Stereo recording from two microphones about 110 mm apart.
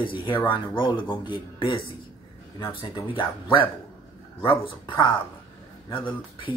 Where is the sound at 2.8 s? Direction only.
45° left (ahead or behind).